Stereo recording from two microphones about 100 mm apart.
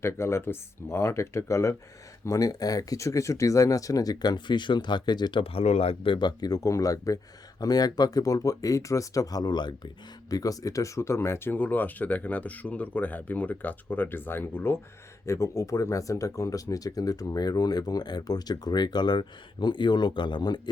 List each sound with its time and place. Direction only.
0.0 s speech: 25° left (ahead or behind); by 5.4 s 45° left (ahead or behind)
5.4 s speech: 80° left; by 20.6 s 45° left (ahead or behind)